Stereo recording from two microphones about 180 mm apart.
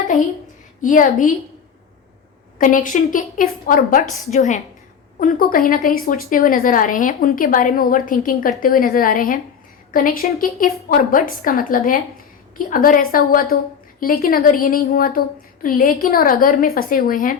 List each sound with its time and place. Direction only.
0.8 s speech: 45° left (ahead or behind)
2.6 s speech: 45° left (ahead or behind)